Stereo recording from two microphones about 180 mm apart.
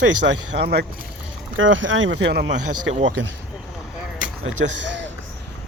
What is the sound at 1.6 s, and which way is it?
Speech, 90° right.